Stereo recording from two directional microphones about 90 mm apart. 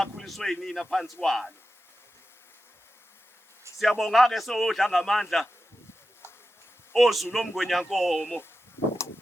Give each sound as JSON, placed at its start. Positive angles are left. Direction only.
{"t": 0.0, "sound": "a man's voice", "side_deg": 0}
{"t": 3.8, "sound": "a man's voice", "side_deg": 0}
{"t": 6.9, "sound": "a man's voice", "side_deg": 0}
{"t": 8.8, "sound": "bee", "side_deg": 30}